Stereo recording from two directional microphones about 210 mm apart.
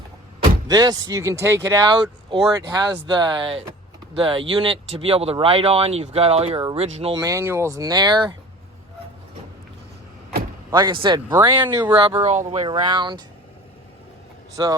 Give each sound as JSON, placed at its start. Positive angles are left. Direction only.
{"t": 0.4, "sound": "speech", "side_deg": -20}
{"t": 10.7, "sound": "speech", "side_deg": -20}
{"t": 11.9, "sound": "speech", "side_deg": -25}
{"t": 12.7, "sound": "speech", "side_deg": -20}
{"t": 14.5, "sound": "a man's voice", "side_deg": -15}